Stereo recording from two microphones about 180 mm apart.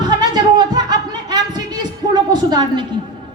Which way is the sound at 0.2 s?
25° right (ahead or behind).